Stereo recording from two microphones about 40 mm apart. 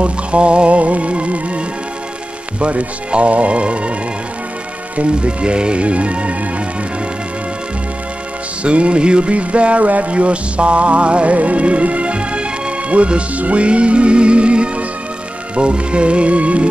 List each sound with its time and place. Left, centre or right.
0.0 s music: right
2.6 s music: right
4.9 s music: right
8.6 s music: right